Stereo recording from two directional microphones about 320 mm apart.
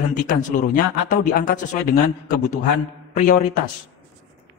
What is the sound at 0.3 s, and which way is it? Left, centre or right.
Speech, left.